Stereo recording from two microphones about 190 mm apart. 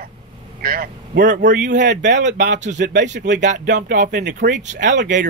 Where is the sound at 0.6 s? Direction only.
50° right (ahead or behind).